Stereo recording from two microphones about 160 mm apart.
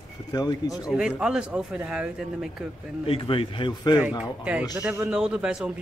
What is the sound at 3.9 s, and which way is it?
Speech, 10° right (ahead or behind).